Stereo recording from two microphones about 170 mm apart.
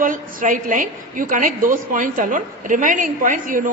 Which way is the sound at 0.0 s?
55° right (ahead or behind).